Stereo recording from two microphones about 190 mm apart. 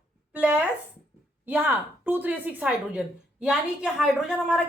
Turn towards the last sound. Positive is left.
turn(degrees=-5)  # may be behind; listen again after turning